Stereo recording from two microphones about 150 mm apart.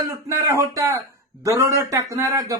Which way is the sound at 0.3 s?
20° right (ahead or behind).